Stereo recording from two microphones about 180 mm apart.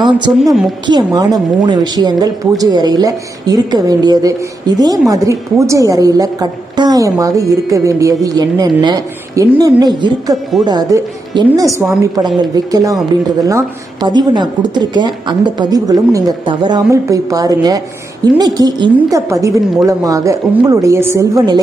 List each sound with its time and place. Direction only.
0.4 s a woman's voice: centre (ahead or behind)
0.8 s a woman's voice: 25° right (ahead or behind)